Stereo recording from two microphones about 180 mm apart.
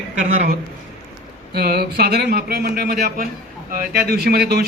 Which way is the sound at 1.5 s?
60° right (ahead or behind).